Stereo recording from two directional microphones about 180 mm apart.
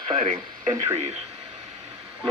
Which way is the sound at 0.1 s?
40° right (ahead or behind).